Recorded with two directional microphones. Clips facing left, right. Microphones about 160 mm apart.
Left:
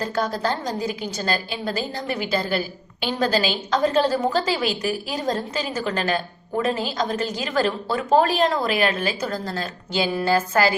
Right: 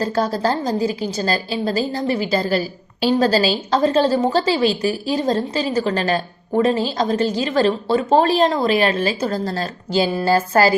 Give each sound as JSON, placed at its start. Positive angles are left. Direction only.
{"t": 0.0, "sound": "a woman's voice", "side_deg": -35}